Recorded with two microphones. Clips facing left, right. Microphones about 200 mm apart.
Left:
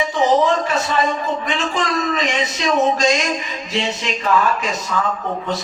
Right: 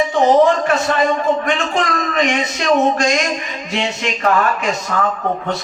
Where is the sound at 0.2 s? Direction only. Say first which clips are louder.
Right 4 dB; 55° right (ahead or behind).